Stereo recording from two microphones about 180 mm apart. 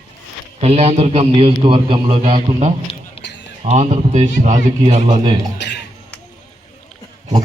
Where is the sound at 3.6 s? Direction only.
35° right (ahead or behind).